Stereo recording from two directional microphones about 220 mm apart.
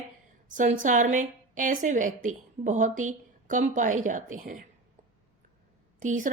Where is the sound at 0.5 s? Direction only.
35° right (ahead or behind).